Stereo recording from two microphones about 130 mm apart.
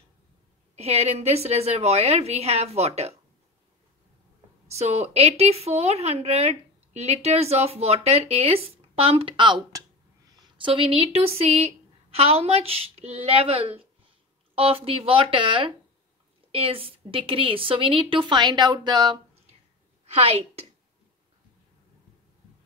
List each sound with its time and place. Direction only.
0.7 s a woman's voice: 55° right (ahead or behind)
4.6 s a woman's voice: 55° right (ahead or behind); by 19.2 s 35° right (ahead or behind)